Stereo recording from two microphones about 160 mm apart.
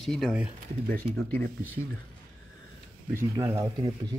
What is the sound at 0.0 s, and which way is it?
Speech, centre (ahead or behind).